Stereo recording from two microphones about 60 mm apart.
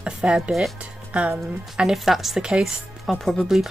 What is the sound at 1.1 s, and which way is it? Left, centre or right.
Speech, right.